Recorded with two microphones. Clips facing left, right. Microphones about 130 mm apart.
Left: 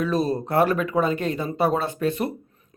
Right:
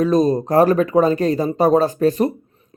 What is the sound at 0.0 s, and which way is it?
Speech, 35° right (ahead or behind).